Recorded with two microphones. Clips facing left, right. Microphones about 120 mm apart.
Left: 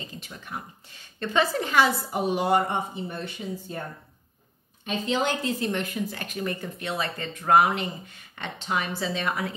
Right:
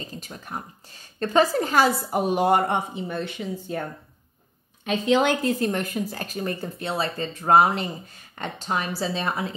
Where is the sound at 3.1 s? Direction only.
90° right.